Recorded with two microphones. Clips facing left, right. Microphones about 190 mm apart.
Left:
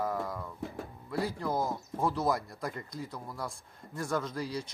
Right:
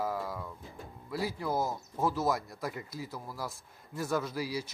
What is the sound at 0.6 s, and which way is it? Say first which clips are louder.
Music: left 10 dB; 80° left.